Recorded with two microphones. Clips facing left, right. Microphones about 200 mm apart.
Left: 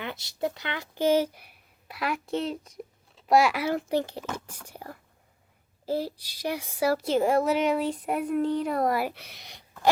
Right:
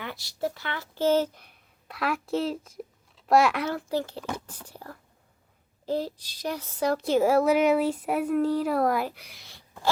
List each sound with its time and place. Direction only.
0.0 s a woman's voice: 20° left (ahead or behind); by 3.7 s centre (ahead or behind)
3.7 s a woman's voice: 20° left (ahead or behind); by 9.0 s centre (ahead or behind)
9.1 s speech: 25° left (ahead or behind)